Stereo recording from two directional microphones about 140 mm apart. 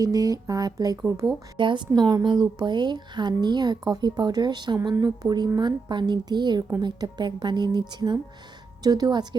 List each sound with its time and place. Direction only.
0.0 s a woman's voice: 25° right (ahead or behind)